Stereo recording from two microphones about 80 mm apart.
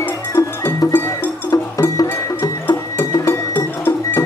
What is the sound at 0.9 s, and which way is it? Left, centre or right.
Music, left.